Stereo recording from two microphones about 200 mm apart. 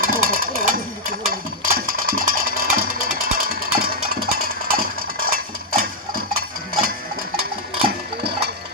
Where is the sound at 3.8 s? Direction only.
50° right (ahead or behind).